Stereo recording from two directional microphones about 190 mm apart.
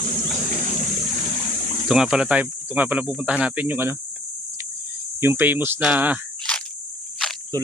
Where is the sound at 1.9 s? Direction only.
5° right (ahead or behind).